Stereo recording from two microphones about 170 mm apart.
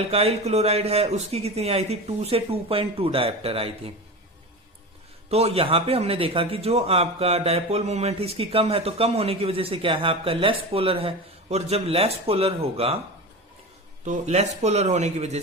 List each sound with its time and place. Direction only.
0.1 s a man's voice: 35° right (ahead or behind)
5.3 s a man's voice: 35° right (ahead or behind)
14.0 s a man's voice: 45° right (ahead or behind)